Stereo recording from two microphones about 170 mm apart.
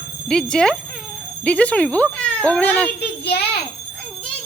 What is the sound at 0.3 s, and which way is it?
Speech, 5° left (ahead or behind).